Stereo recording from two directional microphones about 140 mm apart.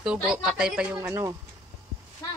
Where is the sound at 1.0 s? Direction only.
20° right (ahead or behind).